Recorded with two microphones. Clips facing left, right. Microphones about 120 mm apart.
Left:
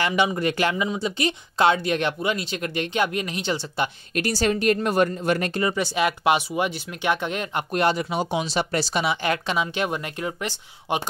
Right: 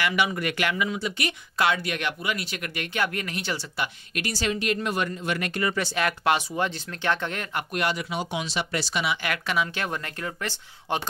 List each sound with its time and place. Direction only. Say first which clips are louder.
0.0 s speech: left 4 dB; 25° left (ahead or behind)
5.5 s speech: left 3 dB; 25° left (ahead or behind)
7.7 s speech: left 6 dB; 30° left (ahead or behind); by 11.1 s 15° left (ahead or behind)